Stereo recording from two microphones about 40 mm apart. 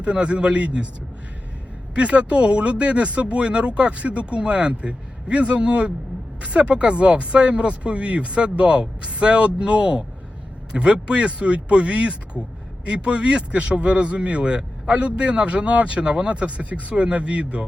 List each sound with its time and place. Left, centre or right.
0.0 s speech: right
2.0 s speech: right